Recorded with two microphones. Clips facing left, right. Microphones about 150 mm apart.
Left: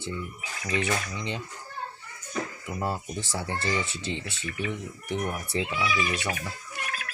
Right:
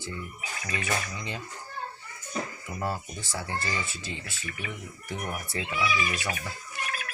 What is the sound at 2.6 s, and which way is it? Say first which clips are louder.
Speech: left 2 dB; 20° left (ahead or behind).